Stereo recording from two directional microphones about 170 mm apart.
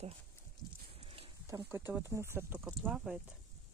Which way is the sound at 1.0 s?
35° right (ahead or behind).